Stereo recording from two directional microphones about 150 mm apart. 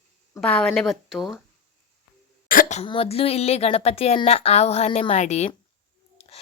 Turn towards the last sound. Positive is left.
turn(degrees=45)  # may be behind; listen again after turning